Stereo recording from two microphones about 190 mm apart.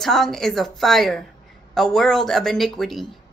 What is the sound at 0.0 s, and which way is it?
Speech, centre (ahead or behind).